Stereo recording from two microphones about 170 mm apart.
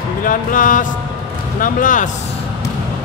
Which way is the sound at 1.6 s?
50° left (ahead or behind).